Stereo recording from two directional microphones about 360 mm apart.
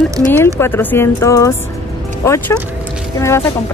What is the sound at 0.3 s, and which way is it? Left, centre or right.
Speech, centre.